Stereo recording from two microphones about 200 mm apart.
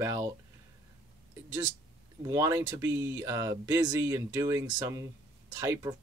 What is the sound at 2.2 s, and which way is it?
Speech, 15° right (ahead or behind).